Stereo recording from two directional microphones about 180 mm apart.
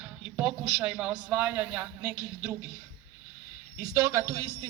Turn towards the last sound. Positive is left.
turn(degrees=-15)  # may be behind; listen again after turning